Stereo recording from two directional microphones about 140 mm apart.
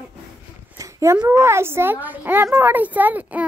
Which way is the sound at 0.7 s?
25° right (ahead or behind).